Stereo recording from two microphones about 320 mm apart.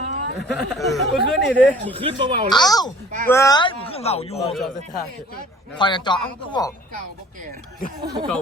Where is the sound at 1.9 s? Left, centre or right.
Centre.